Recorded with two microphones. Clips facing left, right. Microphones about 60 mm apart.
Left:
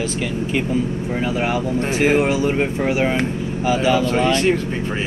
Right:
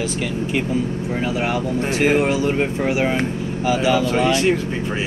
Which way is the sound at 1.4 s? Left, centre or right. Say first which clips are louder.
Left 1 dB; centre.